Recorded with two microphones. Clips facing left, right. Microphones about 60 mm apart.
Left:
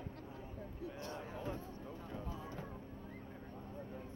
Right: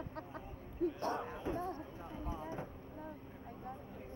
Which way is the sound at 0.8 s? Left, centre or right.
Right.